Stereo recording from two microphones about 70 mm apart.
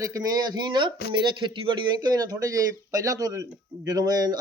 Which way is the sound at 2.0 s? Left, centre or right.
Right.